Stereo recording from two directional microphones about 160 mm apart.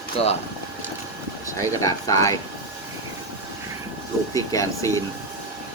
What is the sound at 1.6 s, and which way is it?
Speech, 20° left (ahead or behind).